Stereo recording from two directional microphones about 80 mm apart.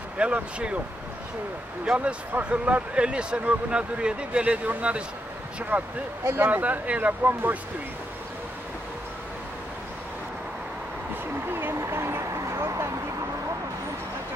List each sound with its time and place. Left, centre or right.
0.2 s speech: centre
1.9 s speech: centre
11.4 s a sound: right